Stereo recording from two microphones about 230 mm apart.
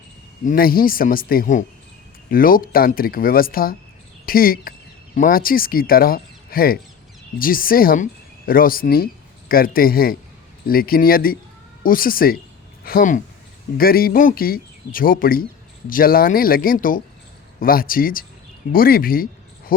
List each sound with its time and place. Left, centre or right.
0.4 s speech: left